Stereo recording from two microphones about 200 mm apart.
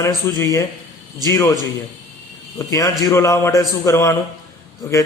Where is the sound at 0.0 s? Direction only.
15° left (ahead or behind).